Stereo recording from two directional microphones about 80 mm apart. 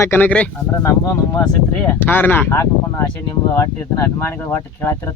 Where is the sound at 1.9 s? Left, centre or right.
Left.